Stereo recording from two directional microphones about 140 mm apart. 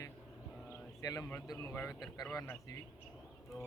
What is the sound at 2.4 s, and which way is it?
Speech, 20° left (ahead or behind).